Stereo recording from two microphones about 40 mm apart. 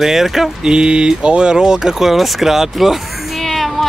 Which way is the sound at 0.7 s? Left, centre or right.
Right.